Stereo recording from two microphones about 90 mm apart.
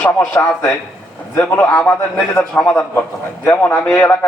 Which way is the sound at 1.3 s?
15° left (ahead or behind).